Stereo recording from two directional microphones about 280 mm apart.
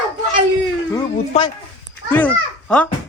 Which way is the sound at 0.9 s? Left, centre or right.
Centre.